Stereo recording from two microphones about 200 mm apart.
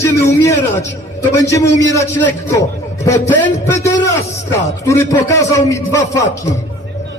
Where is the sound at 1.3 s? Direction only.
15° left (ahead or behind).